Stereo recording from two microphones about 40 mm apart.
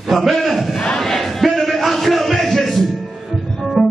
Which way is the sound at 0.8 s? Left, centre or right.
Left.